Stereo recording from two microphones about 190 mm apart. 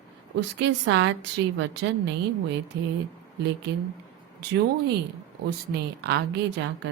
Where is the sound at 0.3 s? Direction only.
70° right (ahead or behind).